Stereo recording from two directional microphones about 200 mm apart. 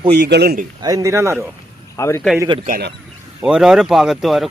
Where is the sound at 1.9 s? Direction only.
15° left (ahead or behind).